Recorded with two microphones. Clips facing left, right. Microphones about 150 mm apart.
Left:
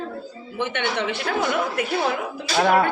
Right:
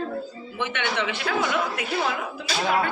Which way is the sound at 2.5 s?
55° left (ahead or behind).